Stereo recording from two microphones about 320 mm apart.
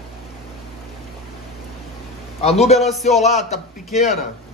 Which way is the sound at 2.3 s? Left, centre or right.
Centre.